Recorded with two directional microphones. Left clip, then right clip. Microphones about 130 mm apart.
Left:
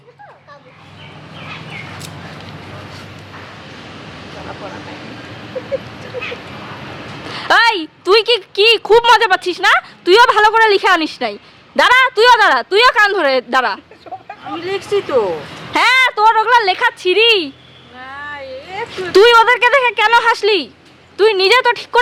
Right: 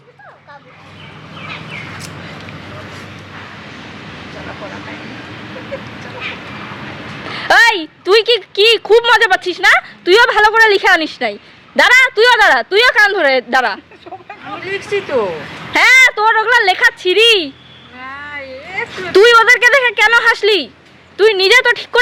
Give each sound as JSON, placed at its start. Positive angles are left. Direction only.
{"t": 7.3, "sound": "a woman's voice", "side_deg": 15}
{"t": 18.3, "sound": "a sound", "side_deg": 5}
{"t": 19.1, "sound": "a woman's voice", "side_deg": 15}